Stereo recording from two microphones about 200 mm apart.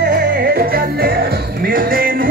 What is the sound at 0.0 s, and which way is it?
Music, 55° right (ahead or behind).